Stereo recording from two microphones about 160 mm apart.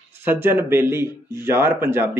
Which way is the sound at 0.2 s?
15° right (ahead or behind).